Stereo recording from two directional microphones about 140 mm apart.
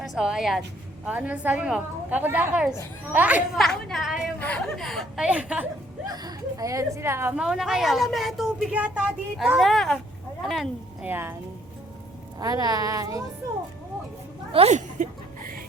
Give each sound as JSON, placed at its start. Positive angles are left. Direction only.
{"t": 0.0, "sound": "a woman's voice", "side_deg": -5}
{"t": 3.5, "sound": "speech", "side_deg": 5}
{"t": 4.4, "sound": "speech", "side_deg": 10}
{"t": 6.1, "sound": "speech", "side_deg": -25}
{"t": 7.3, "sound": "speech", "side_deg": -5}
{"t": 11.0, "sound": "a woman's voice", "side_deg": -15}
{"t": 12.4, "sound": "speech", "side_deg": -25}
{"t": 14.5, "sound": "speech", "side_deg": -50}